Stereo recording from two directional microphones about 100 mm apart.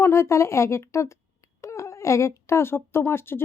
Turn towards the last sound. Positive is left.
turn(degrees=25)  # may be behind; listen again after turning